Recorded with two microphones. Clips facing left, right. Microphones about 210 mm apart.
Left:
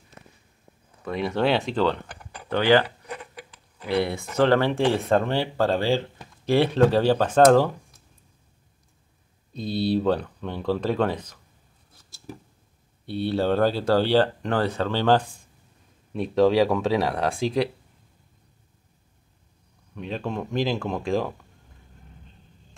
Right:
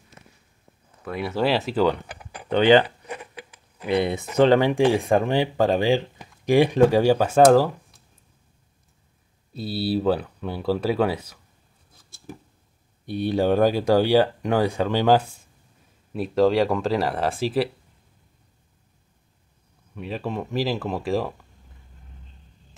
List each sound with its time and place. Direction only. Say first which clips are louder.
1.0 s speech: even; 5° right (ahead or behind)
2.5 s speech: right 3 dB; 20° right (ahead or behind)
9.5 s speech: left 1 dB; 5° right (ahead or behind)
13.0 s speech: right 2 dB; 15° right (ahead or behind)
20.0 s speech: right 1 dB; 5° right (ahead or behind)